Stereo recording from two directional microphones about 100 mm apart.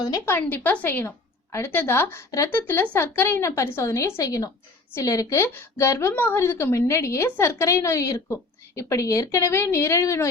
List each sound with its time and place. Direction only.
0.3 s a woman's voice: 20° left (ahead or behind)